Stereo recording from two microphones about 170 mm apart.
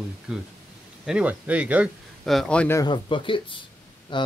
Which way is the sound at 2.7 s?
25° left (ahead or behind).